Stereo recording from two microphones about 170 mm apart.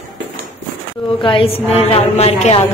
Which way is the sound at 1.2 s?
30° left (ahead or behind).